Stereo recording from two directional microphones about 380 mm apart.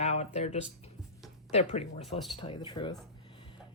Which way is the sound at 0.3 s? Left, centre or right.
Centre.